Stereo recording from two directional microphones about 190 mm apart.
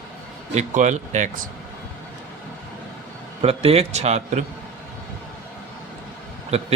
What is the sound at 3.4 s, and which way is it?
A man's voice, 30° right (ahead or behind).